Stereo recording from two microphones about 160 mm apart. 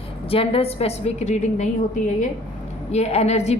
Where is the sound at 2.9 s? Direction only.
40° left (ahead or behind).